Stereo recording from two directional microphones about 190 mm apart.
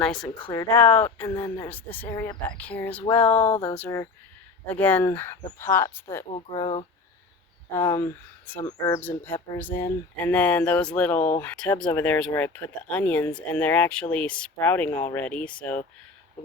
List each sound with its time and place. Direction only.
0.0 s speech: 5° left (ahead or behind)
0.3 s speech: 25° left (ahead or behind)
0.7 s speech: 10° left (ahead or behind)
6.3 s speech: 30° left (ahead or behind)
7.7 s speech: 15° left (ahead or behind)